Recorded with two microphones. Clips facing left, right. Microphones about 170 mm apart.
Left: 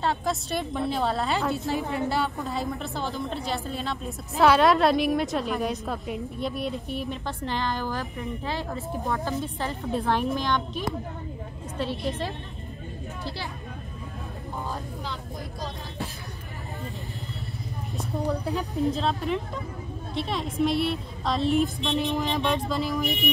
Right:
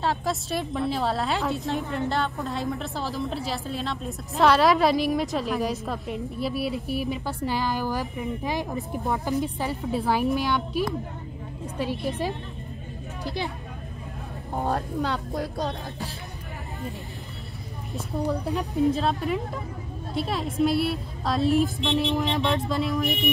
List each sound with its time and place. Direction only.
0.0 s a woman's voice: centre (ahead or behind)
12.1 s a woman's voice: 15° right (ahead or behind)
14.6 s speech: 70° right (ahead or behind)
18.1 s a woman's voice: centre (ahead or behind)